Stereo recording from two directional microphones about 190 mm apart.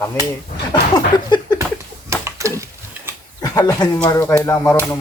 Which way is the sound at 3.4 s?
20° left (ahead or behind).